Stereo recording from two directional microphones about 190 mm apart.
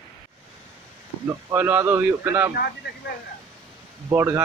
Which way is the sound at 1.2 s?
10° right (ahead or behind).